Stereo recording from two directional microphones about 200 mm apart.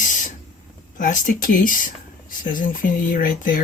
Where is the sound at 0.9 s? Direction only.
40° left (ahead or behind).